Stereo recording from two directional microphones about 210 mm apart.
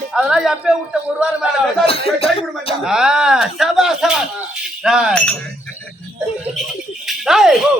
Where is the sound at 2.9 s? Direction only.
5° right (ahead or behind).